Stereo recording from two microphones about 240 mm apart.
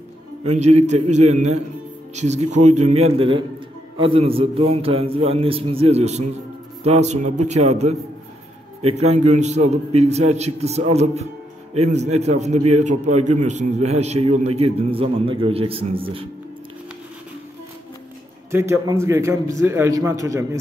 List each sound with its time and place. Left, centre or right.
0.4 s a man's voice: right
18.5 s a man's voice: centre